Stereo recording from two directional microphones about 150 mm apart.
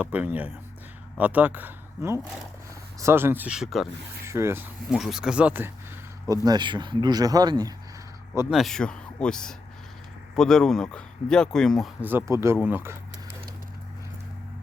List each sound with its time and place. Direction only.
0.0 s speech: 10° right (ahead or behind)
4.3 s speech: 15° right (ahead or behind)
4.9 s speech: centre (ahead or behind)
6.2 s speech: 25° right (ahead or behind)
8.4 s speech: centre (ahead or behind)
12.0 s speech: 15° right (ahead or behind)